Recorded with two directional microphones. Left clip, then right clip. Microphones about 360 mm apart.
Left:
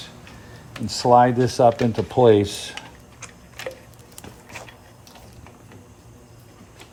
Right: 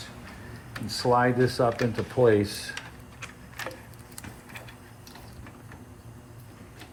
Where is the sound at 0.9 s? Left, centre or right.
Left.